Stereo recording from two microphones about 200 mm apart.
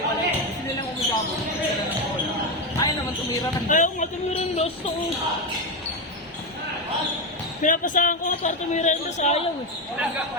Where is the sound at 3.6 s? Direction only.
40° left (ahead or behind).